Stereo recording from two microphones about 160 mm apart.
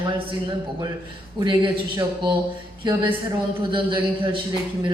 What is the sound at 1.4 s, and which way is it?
Speech, 30° right (ahead or behind).